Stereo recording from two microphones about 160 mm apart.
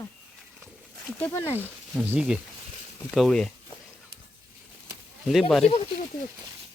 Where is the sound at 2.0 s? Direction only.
5° right (ahead or behind).